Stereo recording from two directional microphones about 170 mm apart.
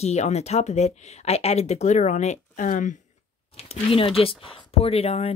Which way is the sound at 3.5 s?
35° left (ahead or behind).